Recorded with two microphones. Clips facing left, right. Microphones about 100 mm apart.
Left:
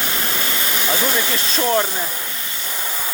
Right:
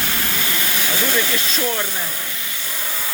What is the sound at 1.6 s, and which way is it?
Speech, 30° left (ahead or behind).